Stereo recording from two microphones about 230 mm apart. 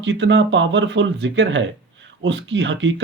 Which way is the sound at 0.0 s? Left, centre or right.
Right.